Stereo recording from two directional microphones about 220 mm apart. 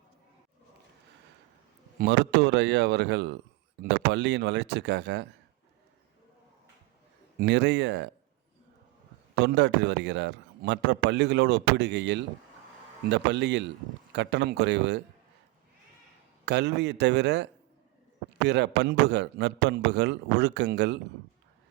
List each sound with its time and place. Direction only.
2.0 s a man's voice: 50° right (ahead or behind)
7.3 s a man's voice: 50° right (ahead or behind)
9.4 s a man's voice: 55° right (ahead or behind)
16.5 s a man's voice: 50° right (ahead or behind)